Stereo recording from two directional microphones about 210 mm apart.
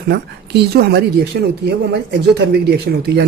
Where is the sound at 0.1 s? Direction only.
50° right (ahead or behind).